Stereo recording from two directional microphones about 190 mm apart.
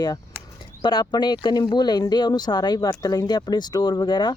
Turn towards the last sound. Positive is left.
turn(degrees=20)  # may be behind; listen again after turning